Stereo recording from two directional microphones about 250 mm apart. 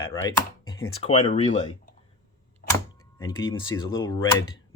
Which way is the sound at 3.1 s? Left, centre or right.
Centre.